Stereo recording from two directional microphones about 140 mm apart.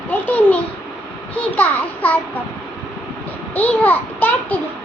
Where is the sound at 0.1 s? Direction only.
10° left (ahead or behind).